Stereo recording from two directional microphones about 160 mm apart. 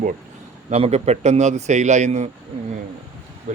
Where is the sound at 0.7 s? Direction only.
40° right (ahead or behind).